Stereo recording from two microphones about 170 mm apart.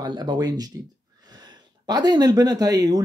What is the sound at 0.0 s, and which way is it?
Speech, 25° right (ahead or behind).